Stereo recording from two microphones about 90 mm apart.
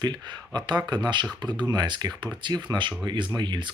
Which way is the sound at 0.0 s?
55° right (ahead or behind).